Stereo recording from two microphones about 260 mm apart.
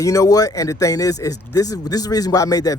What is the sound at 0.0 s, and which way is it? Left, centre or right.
Speech, centre.